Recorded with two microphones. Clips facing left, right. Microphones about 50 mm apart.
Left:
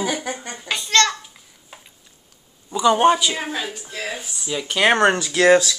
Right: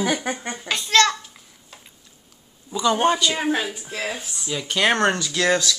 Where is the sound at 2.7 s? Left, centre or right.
Centre.